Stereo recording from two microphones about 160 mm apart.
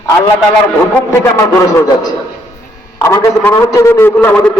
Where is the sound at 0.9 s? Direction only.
15° left (ahead or behind).